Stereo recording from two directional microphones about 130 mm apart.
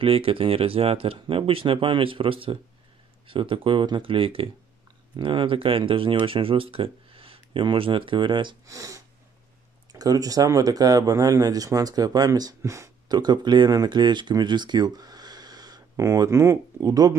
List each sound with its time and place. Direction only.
0.0 s speech: 45° right (ahead or behind)
8.6 s speech: 25° right (ahead or behind)